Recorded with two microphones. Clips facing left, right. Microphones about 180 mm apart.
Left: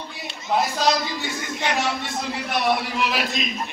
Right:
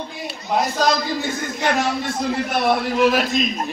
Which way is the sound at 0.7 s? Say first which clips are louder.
Right 3 dB; 45° right (ahead or behind).